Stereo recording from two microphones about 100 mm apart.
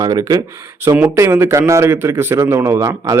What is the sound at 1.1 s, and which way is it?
A man's voice, 25° right (ahead or behind).